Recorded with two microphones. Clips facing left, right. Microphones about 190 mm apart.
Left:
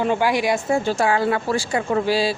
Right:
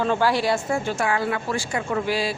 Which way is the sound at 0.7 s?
30° left (ahead or behind).